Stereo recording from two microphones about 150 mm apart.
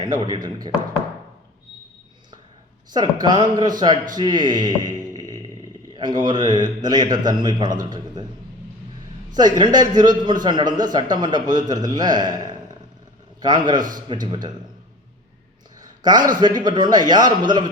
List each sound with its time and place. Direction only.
0.0 s a man's voice: 30° right (ahead or behind)
2.9 s a man's voice: 30° right (ahead or behind)
9.3 s a man's voice: 30° right (ahead or behind)
15.8 s a man's voice: 25° right (ahead or behind)